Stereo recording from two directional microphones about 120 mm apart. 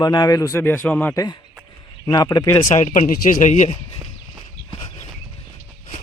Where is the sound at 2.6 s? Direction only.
75° left (ahead or behind).